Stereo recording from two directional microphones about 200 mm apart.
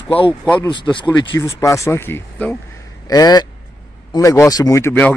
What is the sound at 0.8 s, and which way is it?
A man's voice, 25° left (ahead or behind).